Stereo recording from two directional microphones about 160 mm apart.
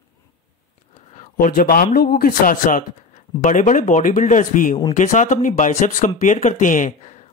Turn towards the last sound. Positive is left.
turn(degrees=50)  # may be behind; listen again after turning